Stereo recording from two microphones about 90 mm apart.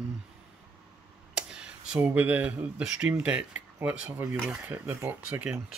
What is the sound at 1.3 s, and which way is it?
Speech, 10° right (ahead or behind).